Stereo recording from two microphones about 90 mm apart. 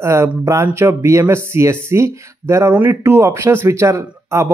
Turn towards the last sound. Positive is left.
turn(degrees=-35)  # may be behind; listen again after turning